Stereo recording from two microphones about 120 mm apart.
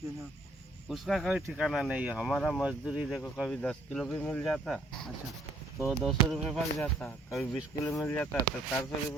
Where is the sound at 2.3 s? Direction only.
5° left (ahead or behind).